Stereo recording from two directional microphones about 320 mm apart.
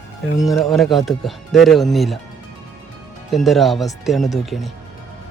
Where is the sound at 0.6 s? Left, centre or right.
Centre.